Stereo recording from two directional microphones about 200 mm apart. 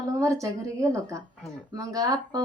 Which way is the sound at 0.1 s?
15° right (ahead or behind).